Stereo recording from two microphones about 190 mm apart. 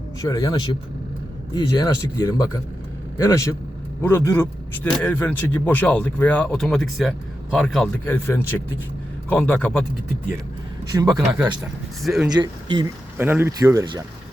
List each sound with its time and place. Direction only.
0.2 s a man's voice: 20° left (ahead or behind); by 7.9 s centre (ahead or behind)
8.0 s speech: 10° left (ahead or behind)
10.9 s speech: 20° right (ahead or behind)
12.0 s a man's voice: centre (ahead or behind)
12.3 s speech: 25° right (ahead or behind)
13.1 s speech: 10° right (ahead or behind)